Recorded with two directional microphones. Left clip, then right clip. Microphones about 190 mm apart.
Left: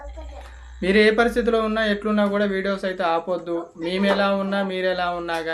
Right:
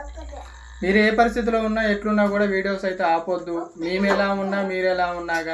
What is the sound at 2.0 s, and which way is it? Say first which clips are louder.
Speech: right 1 dB; 25° left (ahead or behind).